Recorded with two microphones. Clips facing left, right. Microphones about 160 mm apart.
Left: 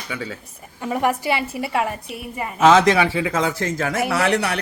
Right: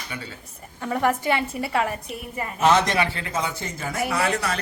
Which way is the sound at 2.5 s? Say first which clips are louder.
Left 6 dB; 90° left.